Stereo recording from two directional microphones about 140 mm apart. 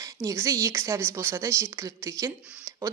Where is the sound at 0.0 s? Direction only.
20° right (ahead or behind).